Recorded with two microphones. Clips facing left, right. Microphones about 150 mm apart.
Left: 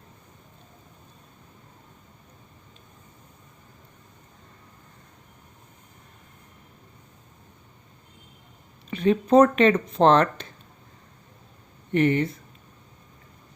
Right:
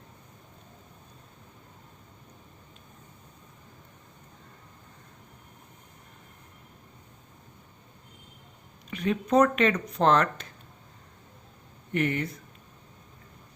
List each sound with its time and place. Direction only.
8.9 s speech: 30° left (ahead or behind)
11.9 s speech: 30° left (ahead or behind)